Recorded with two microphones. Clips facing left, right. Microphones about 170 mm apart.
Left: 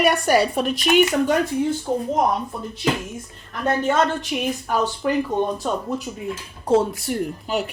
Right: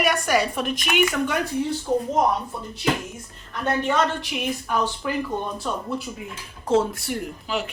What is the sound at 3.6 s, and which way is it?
Speech, 45° left (ahead or behind).